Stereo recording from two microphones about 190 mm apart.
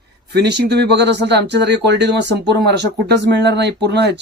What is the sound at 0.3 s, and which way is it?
Speech, 60° right (ahead or behind).